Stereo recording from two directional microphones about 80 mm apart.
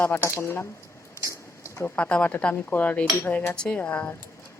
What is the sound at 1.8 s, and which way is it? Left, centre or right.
Speech, centre.